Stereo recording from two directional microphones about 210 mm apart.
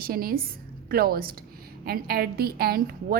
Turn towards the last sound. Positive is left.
turn(degrees=-45)  # may be behind; listen again after turning